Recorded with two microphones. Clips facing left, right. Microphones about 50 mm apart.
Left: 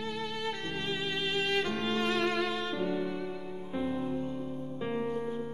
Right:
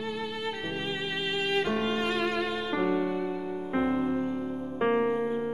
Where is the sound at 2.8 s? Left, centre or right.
Right.